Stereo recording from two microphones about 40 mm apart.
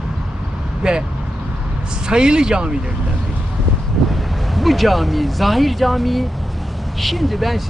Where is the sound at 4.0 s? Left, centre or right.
Centre.